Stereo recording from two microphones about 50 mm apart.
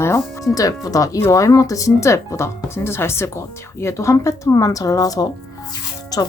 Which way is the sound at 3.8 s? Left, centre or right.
Left.